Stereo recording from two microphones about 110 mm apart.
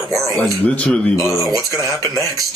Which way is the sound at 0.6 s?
10° left (ahead or behind).